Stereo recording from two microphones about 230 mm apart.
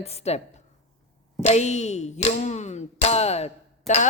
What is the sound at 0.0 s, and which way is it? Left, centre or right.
Speech, left.